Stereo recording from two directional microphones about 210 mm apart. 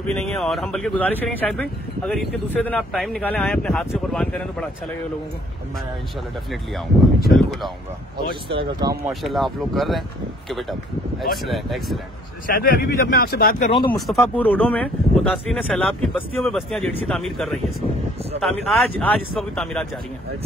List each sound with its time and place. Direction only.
0.0 s speech: 5° left (ahead or behind)
8.5 s speech: 20° right (ahead or behind)
9.2 s speech: centre (ahead or behind)
11.4 s speech: centre (ahead or behind)
12.4 s speech: 45° left (ahead or behind)
13.7 s speech: 25° left (ahead or behind)
13.9 s speech: centre (ahead or behind)